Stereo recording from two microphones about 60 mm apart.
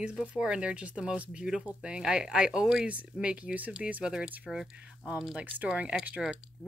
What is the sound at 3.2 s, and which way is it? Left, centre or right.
Speech, right.